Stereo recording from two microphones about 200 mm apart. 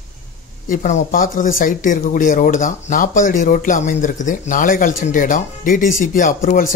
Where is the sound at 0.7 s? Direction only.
40° left (ahead or behind).